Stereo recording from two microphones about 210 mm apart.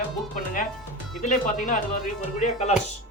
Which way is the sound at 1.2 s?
35° left (ahead or behind).